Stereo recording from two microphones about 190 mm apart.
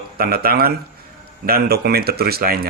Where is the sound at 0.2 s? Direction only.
55° right (ahead or behind).